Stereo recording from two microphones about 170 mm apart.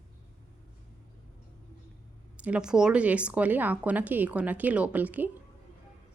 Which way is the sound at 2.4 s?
5° right (ahead or behind).